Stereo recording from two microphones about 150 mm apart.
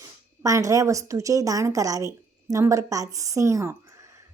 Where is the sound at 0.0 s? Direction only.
20° right (ahead or behind).